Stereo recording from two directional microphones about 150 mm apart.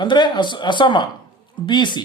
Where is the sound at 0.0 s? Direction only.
30° left (ahead or behind).